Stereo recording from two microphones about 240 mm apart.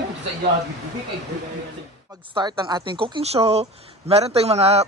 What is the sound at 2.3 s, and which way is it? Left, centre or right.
A woman's voice, centre.